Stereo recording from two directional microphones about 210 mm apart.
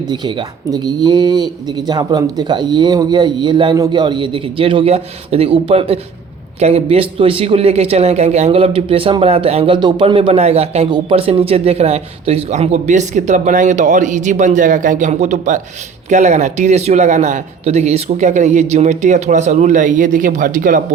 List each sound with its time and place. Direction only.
0.1 s a man's voice: 20° right (ahead or behind); by 20.8 s 40° right (ahead or behind)